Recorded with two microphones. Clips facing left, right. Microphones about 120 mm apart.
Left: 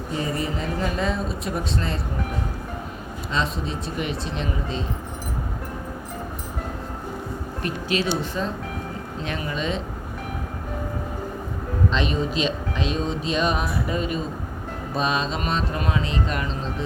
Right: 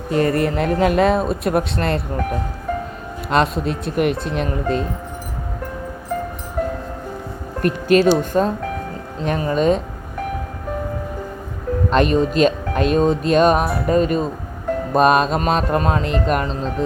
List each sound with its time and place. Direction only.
0.1 s speech: 65° right (ahead or behind)
3.2 s speech: 60° right (ahead or behind)
7.6 s speech: 50° right (ahead or behind)
11.9 s speech: 50° right (ahead or behind)
14.9 s speech: 55° right (ahead or behind)